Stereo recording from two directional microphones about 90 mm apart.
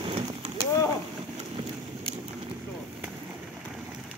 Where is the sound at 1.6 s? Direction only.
85° right.